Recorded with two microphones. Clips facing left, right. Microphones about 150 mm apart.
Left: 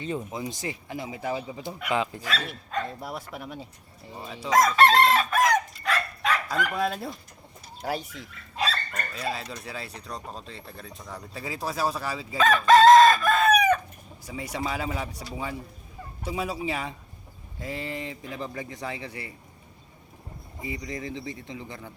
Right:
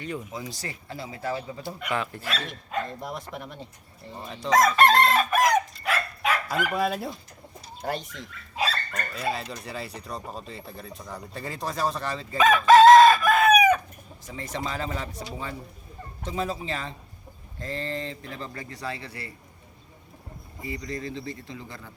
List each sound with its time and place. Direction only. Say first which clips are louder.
0.0 s speech: left 3 dB; 25° left (ahead or behind)
2.7 s speech: right 1 dB; 5° left (ahead or behind)
8.5 s speech: right 1 dB; 5° right (ahead or behind)
12.4 s chicken: right 2 dB; 10° right (ahead or behind)
14.3 s speech: left 1 dB; 10° left (ahead or behind)
16.2 s speech: even; 10° left (ahead or behind)
20.6 s speech: right 1 dB; 20° left (ahead or behind)